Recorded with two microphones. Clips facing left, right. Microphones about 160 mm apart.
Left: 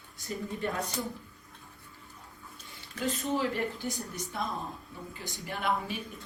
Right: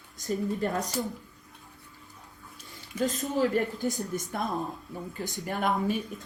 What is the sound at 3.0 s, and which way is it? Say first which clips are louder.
A woman's voice: right 4 dB; 45° right (ahead or behind).